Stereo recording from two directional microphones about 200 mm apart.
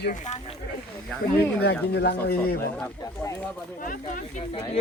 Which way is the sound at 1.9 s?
55° left (ahead or behind).